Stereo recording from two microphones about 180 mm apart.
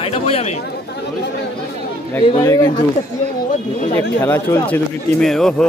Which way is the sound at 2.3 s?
20° left (ahead or behind).